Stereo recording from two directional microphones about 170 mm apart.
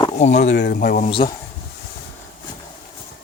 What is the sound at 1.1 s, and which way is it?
Cutlery, 30° left (ahead or behind).